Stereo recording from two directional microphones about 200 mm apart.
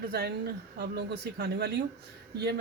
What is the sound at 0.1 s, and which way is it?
Speech, 55° right (ahead or behind).